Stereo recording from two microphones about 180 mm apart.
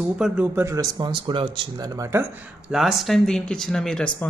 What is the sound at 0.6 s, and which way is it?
Speech, 20° right (ahead or behind).